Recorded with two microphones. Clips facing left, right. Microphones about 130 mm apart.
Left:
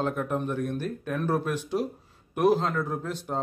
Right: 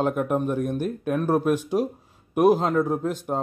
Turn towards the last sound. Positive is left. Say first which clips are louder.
# right 6 dB
turn(degrees=-50)  # may be behind; listen again after turning